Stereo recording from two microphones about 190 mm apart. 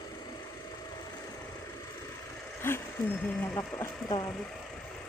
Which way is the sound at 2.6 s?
10° left (ahead or behind).